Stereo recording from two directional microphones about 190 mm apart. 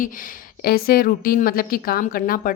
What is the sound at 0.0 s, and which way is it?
A woman's voice, 45° left (ahead or behind).